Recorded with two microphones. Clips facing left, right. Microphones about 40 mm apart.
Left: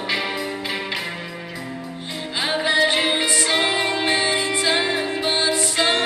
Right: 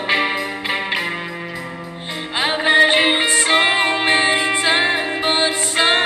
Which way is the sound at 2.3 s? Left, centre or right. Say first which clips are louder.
Right 5 dB; right.